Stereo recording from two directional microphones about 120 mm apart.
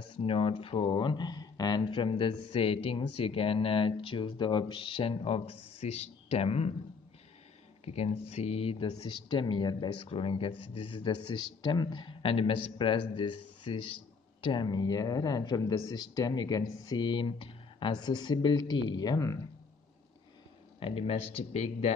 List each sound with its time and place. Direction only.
0.3 s speech: 50° left (ahead or behind)
7.8 s speech: 60° left (ahead or behind)
8.8 s speech: 45° left (ahead or behind)
20.8 s speech: 55° left (ahead or behind)